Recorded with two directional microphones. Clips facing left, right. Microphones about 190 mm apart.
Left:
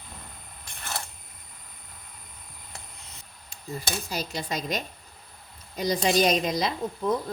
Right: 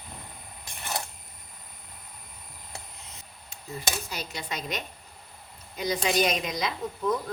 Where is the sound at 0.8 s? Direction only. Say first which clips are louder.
Right 2 dB; 15° right (ahead or behind).